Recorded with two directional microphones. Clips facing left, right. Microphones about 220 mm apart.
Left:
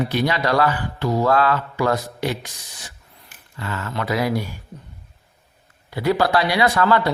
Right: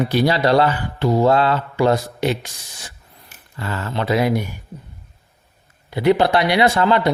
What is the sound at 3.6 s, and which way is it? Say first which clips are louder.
Speech: right 3 dB; 35° right (ahead or behind).